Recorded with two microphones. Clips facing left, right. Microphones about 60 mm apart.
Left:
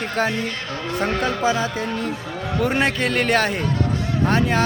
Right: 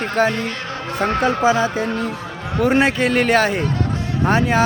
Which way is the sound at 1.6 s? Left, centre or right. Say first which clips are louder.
Right 4 dB; centre.